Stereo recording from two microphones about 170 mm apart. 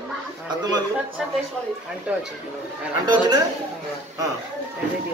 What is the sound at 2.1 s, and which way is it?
Speech, 5° right (ahead or behind).